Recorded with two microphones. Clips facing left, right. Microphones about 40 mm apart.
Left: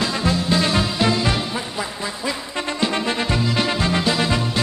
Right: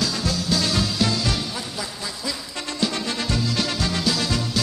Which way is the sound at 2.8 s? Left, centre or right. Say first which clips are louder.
Left 3 dB; left.